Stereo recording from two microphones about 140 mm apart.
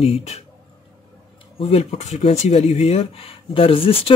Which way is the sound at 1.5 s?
50° left (ahead or behind).